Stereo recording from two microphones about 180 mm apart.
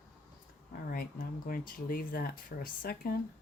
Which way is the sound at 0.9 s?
50° left (ahead or behind).